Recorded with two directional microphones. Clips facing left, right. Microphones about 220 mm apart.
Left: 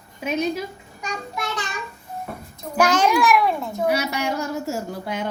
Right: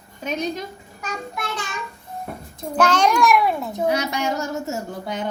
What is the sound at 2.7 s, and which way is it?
A woman's voice, 10° left (ahead or behind).